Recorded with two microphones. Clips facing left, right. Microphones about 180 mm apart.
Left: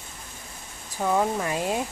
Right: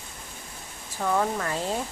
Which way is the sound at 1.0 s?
15° left (ahead or behind).